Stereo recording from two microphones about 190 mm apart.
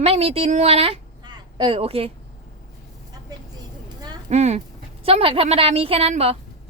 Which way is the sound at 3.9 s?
20° right (ahead or behind).